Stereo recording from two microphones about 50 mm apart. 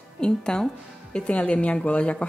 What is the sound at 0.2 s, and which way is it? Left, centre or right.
Speech, centre.